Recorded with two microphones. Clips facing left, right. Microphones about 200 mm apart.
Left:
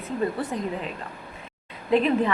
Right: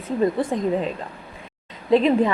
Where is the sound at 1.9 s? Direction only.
35° right (ahead or behind).